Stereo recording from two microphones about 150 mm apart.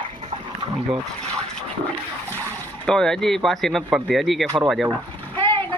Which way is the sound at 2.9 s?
5° left (ahead or behind).